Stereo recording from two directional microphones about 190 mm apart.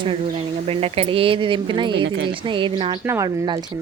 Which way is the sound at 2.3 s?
25° right (ahead or behind).